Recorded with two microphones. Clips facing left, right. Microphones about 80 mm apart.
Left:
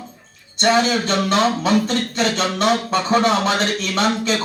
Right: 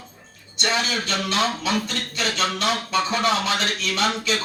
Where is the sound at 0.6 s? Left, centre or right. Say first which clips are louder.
Left 8 dB; left.